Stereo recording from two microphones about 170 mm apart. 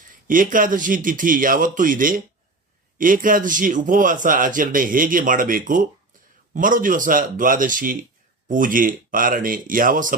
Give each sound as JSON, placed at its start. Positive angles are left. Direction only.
{"t": 0.3, "sound": "a man's voice", "side_deg": -55}